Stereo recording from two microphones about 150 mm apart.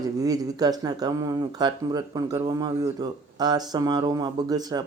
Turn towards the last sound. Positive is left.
turn(degrees=-25)  # may be behind; listen again after turning